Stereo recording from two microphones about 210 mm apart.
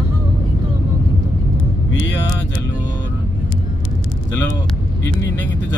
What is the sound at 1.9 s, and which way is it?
Vehicle, 65° left (ahead or behind).